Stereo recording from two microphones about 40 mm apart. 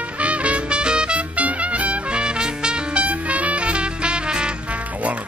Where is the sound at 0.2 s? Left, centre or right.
Right.